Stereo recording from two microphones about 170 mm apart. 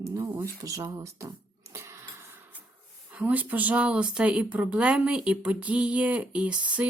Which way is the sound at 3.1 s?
10° right (ahead or behind).